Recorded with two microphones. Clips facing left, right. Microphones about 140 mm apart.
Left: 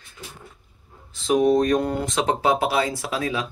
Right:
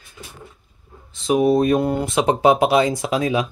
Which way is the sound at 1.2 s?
5° right (ahead or behind).